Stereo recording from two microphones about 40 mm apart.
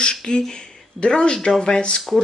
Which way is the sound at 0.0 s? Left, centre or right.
Centre.